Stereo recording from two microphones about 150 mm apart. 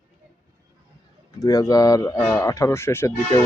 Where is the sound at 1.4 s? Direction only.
25° left (ahead or behind).